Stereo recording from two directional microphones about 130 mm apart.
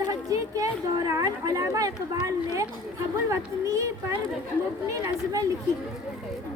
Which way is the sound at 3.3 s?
25° right (ahead or behind).